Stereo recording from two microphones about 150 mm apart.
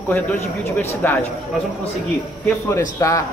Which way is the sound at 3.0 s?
20° left (ahead or behind).